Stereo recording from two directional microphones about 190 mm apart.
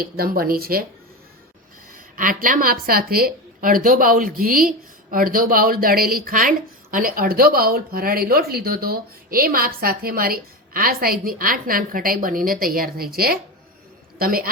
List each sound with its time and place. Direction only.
0.0 s speech: 50° right (ahead or behind)
1.9 s speech: 45° right (ahead or behind)